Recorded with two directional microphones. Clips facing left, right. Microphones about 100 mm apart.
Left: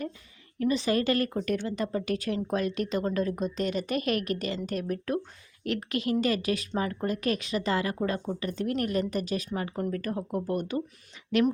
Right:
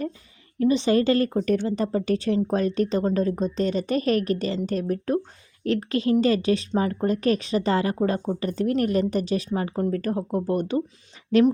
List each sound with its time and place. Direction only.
0.6 s a woman's voice: 30° right (ahead or behind)